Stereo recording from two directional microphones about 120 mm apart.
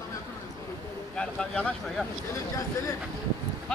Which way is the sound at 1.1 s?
5° left (ahead or behind).